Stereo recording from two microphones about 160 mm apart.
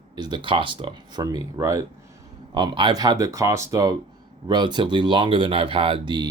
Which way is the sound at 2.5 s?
30° right (ahead or behind).